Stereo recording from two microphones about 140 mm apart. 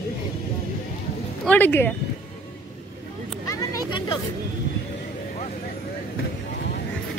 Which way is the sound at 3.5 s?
25° left (ahead or behind).